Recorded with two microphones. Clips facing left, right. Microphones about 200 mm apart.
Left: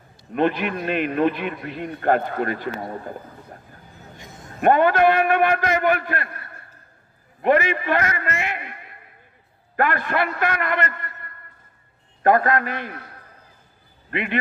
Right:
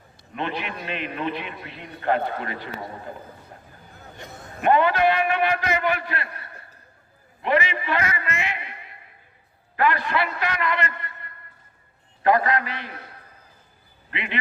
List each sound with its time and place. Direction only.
0.3 s a man's voice: 50° left (ahead or behind)
4.6 s a man's voice: 50° left (ahead or behind)
7.4 s a man's voice: 50° left (ahead or behind)
12.2 s a man's voice: 50° left (ahead or behind)
14.1 s a man's voice: 50° left (ahead or behind)